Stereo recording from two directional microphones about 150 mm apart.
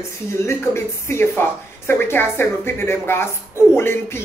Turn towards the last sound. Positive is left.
turn(degrees=15)  # may be behind; listen again after turning